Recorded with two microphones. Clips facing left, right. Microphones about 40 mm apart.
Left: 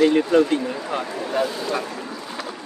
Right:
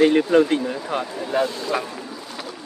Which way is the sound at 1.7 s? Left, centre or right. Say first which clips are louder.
Right 4 dB; right.